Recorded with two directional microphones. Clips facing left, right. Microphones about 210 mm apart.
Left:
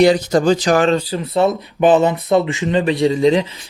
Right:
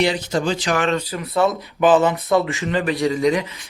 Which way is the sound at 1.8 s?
20° left (ahead or behind).